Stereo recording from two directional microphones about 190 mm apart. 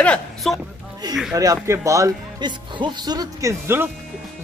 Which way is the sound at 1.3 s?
20° right (ahead or behind).